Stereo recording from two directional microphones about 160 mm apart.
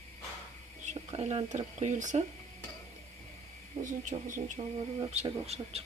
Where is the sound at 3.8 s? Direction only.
55° right (ahead or behind).